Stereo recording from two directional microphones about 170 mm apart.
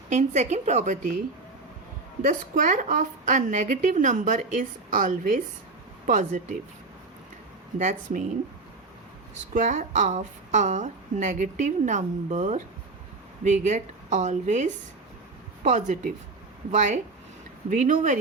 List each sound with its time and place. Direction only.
0.1 s a woman's voice: 45° right (ahead or behind)
2.2 s a woman's voice: 50° right (ahead or behind)
7.8 s a woman's voice: 45° right (ahead or behind)
9.6 s a woman's voice: 45° right (ahead or behind)